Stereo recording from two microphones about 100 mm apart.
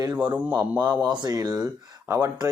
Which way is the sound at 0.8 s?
45° right (ahead or behind).